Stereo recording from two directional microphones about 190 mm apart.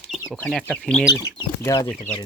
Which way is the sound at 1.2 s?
20° left (ahead or behind).